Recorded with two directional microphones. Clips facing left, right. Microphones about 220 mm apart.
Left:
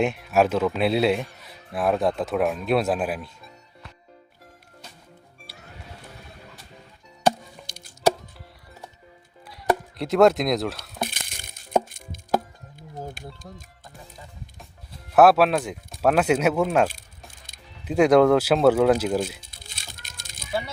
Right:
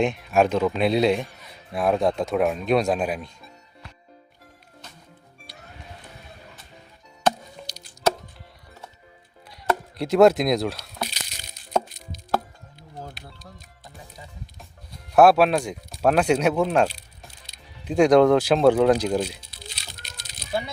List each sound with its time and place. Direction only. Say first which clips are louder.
0.0 s speech: even; 5° left (ahead or behind)
10.0 s speech: right 2 dB; centre (ahead or behind)
11.0 s a sound: left 2 dB; 50° left (ahead or behind)
11.9 s music: left 2 dB; 50° left (ahead or behind)
15.1 s speech: even; centre (ahead or behind)
19.4 s a sound: right 4 dB; 50° left (ahead or behind)